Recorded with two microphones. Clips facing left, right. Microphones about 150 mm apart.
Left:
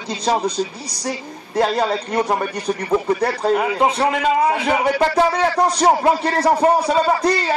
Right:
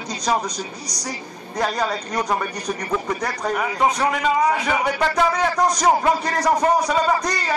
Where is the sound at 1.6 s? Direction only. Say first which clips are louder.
Left 5 dB; 25° left (ahead or behind).